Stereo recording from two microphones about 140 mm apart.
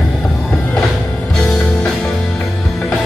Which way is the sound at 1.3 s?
5° left (ahead or behind).